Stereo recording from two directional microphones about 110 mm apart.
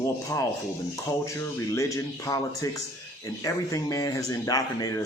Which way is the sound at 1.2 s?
25° left (ahead or behind).